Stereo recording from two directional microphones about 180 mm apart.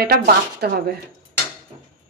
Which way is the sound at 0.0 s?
60° right (ahead or behind).